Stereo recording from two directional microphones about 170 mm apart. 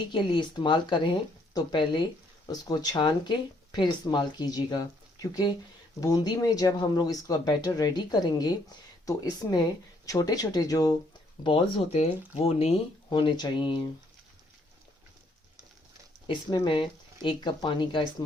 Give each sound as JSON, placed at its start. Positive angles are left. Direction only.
{"t": 0.1, "sound": "speech", "side_deg": 30}
{"t": 10.1, "sound": "speech", "side_deg": 20}
{"t": 11.4, "sound": "speech", "side_deg": 35}
{"t": 16.2, "sound": "speech", "side_deg": 25}